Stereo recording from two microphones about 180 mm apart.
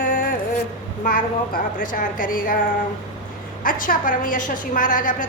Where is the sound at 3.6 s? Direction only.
50° left (ahead or behind).